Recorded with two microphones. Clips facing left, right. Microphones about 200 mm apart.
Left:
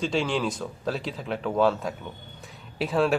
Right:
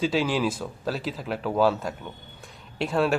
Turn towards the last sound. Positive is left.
turn(degrees=0)  # may be behind; listen again after turning